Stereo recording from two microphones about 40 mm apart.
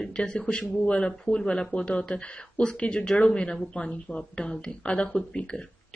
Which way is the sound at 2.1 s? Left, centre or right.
Left.